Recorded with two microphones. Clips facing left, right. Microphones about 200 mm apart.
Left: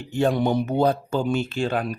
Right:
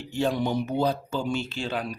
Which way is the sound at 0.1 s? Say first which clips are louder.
Left 5 dB; 55° left (ahead or behind).